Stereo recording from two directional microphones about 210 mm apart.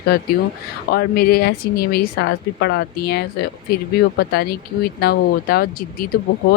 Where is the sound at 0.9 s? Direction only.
50° left (ahead or behind).